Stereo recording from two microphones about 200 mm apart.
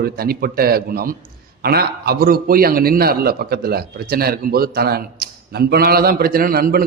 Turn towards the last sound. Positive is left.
turn(degrees=-45)  # may be behind; listen again after turning